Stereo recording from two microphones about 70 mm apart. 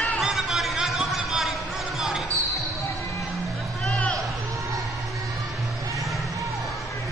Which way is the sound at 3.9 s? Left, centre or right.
Centre.